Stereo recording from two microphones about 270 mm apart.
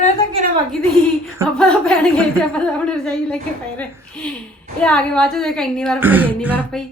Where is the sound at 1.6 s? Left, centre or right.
Centre.